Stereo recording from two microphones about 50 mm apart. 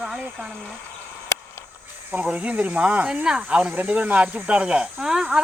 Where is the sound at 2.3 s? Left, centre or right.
Right.